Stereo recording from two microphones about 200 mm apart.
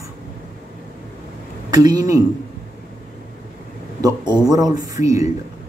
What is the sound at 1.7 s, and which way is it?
Speech, 20° right (ahead or behind).